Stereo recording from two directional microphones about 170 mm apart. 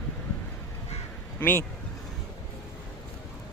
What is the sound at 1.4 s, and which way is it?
Speech, 10° left (ahead or behind).